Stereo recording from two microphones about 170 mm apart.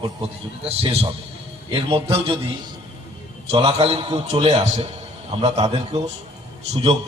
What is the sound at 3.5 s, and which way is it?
A man's voice, 35° right (ahead or behind).